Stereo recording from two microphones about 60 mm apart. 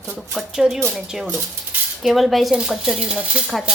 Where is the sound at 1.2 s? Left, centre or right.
Right.